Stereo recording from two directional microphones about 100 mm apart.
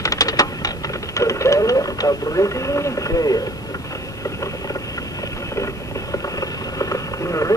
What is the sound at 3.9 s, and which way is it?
Vehicle, 35° left (ahead or behind).